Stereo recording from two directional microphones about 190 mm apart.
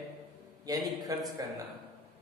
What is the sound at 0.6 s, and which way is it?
Speech, 20° right (ahead or behind).